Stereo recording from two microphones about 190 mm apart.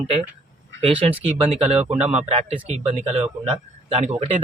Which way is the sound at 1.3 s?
30° right (ahead or behind).